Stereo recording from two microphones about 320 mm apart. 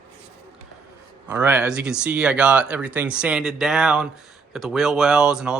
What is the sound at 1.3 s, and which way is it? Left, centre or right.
Speech, centre.